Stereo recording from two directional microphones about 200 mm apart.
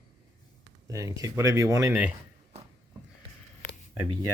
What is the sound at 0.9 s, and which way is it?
Speech, 15° right (ahead or behind).